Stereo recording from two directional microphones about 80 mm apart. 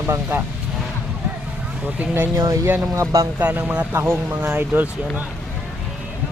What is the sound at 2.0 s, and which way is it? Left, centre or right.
Speech, right.